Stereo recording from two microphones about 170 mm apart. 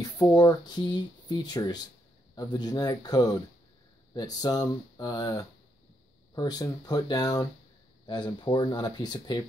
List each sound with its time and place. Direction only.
0.0 s speech: 20° left (ahead or behind)